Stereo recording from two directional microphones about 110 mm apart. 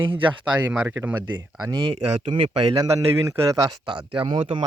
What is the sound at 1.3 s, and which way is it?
Speech, 45° right (ahead or behind).